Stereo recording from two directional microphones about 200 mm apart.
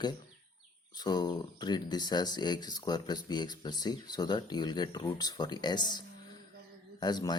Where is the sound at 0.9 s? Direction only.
20° left (ahead or behind).